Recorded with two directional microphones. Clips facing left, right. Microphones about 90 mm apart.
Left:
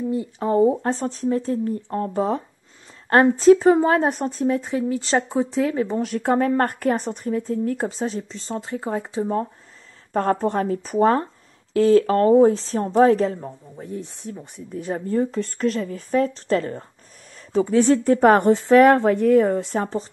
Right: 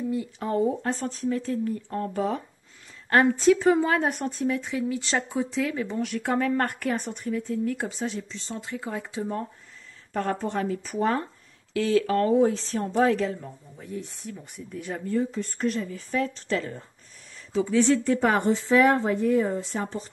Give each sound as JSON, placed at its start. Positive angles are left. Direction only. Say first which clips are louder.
{"t": 0.1, "sound": "speech", "louder": "left 6 dB", "side_deg": 30}
{"t": 10.1, "sound": "speech", "louder": "left 7 dB", "side_deg": 40}
{"t": 15.3, "sound": "speech", "louder": "left 5 dB", "side_deg": 85}
{"t": 15.9, "sound": "a woman's voice", "louder": "left 7 dB", "side_deg": 40}